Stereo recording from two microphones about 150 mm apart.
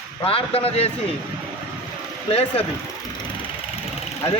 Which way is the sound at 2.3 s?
40° left (ahead or behind).